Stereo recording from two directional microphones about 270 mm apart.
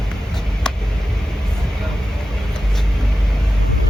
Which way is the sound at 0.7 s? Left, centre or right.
Centre.